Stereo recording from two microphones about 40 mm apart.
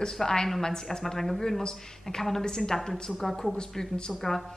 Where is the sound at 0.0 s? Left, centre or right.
Centre.